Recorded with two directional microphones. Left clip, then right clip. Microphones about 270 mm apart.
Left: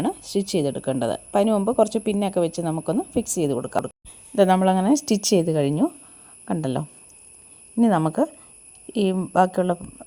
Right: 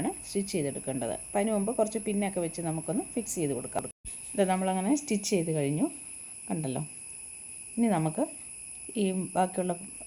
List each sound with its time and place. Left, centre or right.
0.0 s speech: left